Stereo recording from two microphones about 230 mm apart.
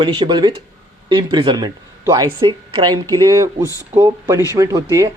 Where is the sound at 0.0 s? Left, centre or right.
Right.